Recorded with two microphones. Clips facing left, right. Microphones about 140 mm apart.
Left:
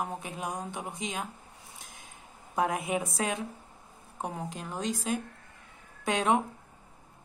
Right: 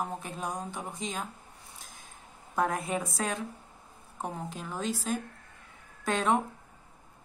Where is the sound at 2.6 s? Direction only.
Centre (ahead or behind).